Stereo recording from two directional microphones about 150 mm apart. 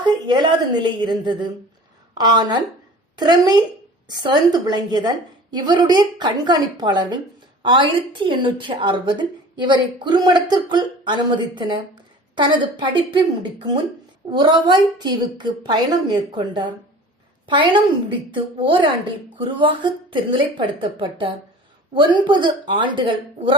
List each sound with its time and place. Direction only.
0.0 s a woman's voice: 30° right (ahead or behind)
18.3 s a woman's voice: 35° right (ahead or behind)